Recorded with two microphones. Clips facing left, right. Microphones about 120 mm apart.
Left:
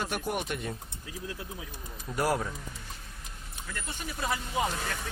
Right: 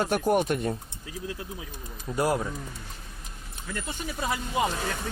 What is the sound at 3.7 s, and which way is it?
Speech, 10° right (ahead or behind).